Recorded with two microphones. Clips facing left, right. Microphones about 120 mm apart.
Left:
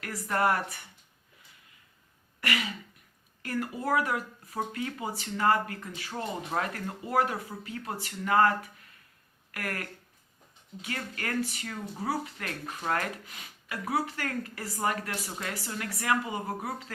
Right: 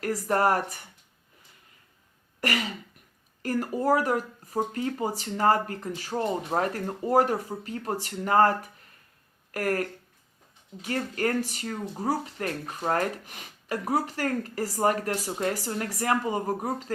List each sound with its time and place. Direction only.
0.0 s speech: 40° right (ahead or behind)
3.4 s speech: 40° right (ahead or behind)
10.8 s speech: 40° right (ahead or behind)